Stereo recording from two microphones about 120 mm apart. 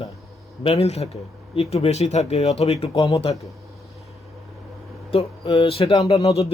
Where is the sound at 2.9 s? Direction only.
30° left (ahead or behind).